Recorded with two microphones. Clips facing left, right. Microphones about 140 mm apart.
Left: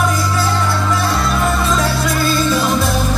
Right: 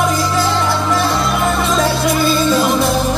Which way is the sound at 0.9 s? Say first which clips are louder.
Right 2 dB; 20° right (ahead or behind).